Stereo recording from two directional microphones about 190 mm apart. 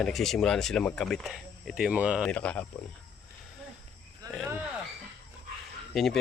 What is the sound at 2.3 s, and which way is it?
Speech, 5° left (ahead or behind).